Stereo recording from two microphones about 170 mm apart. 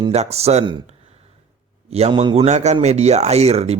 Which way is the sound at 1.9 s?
35° right (ahead or behind).